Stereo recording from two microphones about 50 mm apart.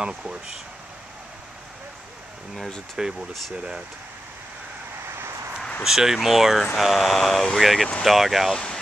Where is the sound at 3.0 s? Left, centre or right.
Centre.